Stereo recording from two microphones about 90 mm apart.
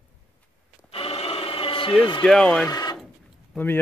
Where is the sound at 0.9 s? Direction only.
90° left; by 2.0 s 70° left (ahead or behind).